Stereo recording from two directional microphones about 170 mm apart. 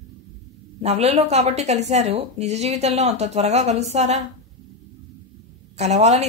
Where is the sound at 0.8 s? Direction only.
40° right (ahead or behind).